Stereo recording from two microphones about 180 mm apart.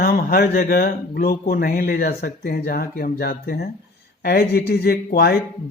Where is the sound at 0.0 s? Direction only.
55° left (ahead or behind).